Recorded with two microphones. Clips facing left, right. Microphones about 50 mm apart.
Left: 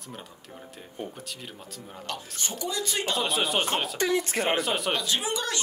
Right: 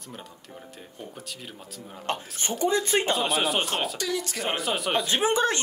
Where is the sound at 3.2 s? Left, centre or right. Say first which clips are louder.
Right 1 dB; centre.